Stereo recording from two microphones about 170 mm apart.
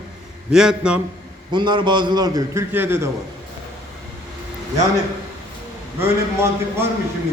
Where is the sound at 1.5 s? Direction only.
25° right (ahead or behind).